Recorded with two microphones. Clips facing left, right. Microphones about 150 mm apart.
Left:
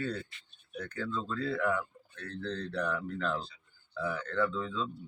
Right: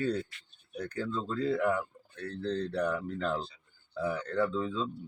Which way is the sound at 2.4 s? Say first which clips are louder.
Right 4 dB; 35° right (ahead or behind).